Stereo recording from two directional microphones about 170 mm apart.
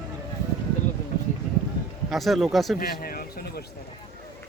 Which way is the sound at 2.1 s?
Centre (ahead or behind).